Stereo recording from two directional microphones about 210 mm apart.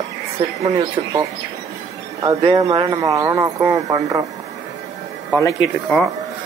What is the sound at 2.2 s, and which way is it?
Speech, 20° right (ahead or behind).